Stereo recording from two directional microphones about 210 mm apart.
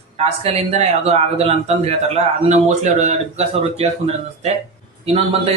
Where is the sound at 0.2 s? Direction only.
30° right (ahead or behind).